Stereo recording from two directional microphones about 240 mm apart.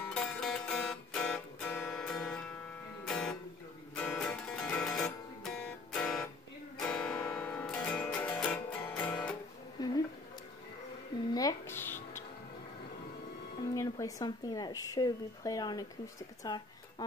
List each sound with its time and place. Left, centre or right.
0.0 s music: centre
9.8 s a sound: centre
11.3 s music: centre
13.7 s speech: centre